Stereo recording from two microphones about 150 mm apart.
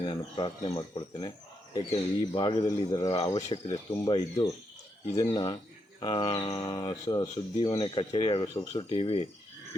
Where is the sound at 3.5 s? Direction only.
35° left (ahead or behind).